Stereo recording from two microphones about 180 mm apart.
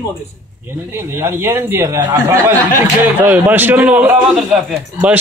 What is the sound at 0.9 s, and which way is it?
A man's voice, 15° right (ahead or behind).